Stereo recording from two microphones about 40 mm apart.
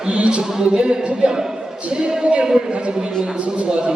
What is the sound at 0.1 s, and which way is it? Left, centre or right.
Speech, right.